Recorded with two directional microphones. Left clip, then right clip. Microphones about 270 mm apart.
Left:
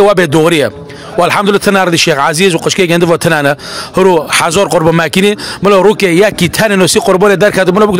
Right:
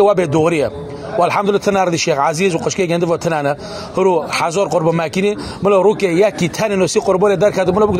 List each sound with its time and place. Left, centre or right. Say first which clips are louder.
0.0 s a man's voice: left 5 dB; left